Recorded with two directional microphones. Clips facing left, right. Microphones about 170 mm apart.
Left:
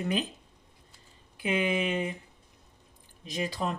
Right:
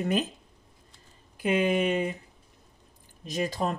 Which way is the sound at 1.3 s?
40° right (ahead or behind).